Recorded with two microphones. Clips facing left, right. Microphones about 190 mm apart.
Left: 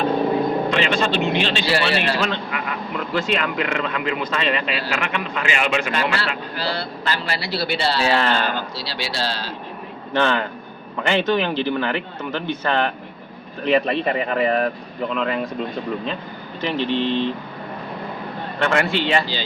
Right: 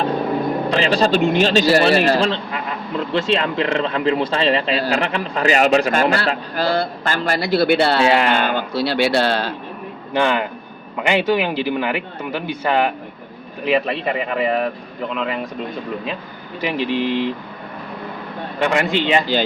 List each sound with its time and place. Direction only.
0.7 s speech: 35° right (ahead or behind); by 8.0 s 55° right (ahead or behind)
8.0 s speech: 20° right (ahead or behind)
8.3 s speech: 55° right (ahead or behind)
10.1 s speech: 15° right (ahead or behind)
16.6 s speech: 10° right (ahead or behind)
18.6 s speech: 15° right (ahead or behind)